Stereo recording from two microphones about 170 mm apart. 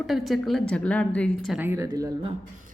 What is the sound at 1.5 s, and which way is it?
Speech, 15° right (ahead or behind).